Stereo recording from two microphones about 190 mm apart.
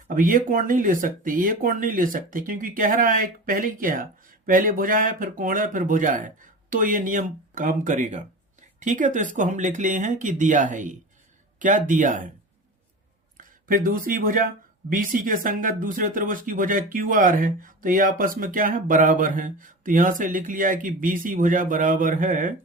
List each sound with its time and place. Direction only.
0.1 s speech: 45° right (ahead or behind)
13.3 s speech: 45° right (ahead or behind)